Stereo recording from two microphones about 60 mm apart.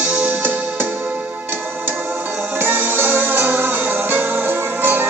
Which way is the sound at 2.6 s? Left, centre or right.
Right.